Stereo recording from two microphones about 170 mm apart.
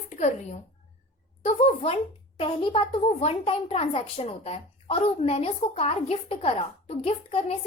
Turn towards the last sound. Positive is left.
turn(degrees=35)  # may be behind; listen again after turning